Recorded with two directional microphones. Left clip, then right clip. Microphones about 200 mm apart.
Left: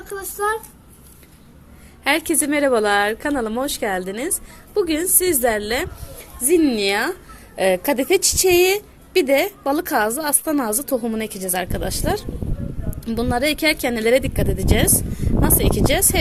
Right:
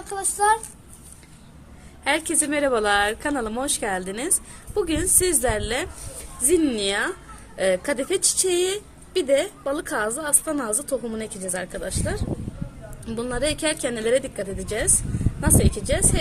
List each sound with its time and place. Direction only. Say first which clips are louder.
0.0 s speech: right 1 dB; 15° right (ahead or behind)
2.0 s a woman's voice: left 4 dB; 30° left (ahead or behind)